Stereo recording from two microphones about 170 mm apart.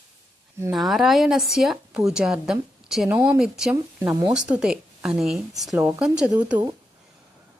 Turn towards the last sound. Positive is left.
turn(degrees=-5)  # may be behind; listen again after turning